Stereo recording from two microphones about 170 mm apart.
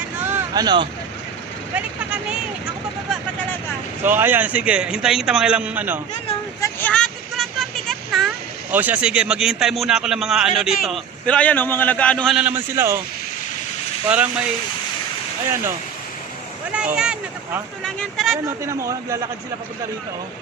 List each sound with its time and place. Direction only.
0.2 s a sound: 15° right (ahead or behind)
1.7 s a man's voice: 5° right (ahead or behind)
4.0 s a man's voice: 10° right (ahead or behind)
6.6 s vehicle: 10° left (ahead or behind)
8.7 s a man's voice: 10° right (ahead or behind)
12.4 s a man's voice: 10° right (ahead or behind)
14.1 s a man's voice: 5° right (ahead or behind)
15.4 s a man's voice: 15° right (ahead or behind)
16.7 s a man's voice: 5° right (ahead or behind)
18.6 s a man's voice: 15° right (ahead or behind)